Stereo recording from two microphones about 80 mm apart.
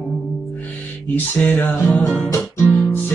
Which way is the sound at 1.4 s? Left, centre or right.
Left.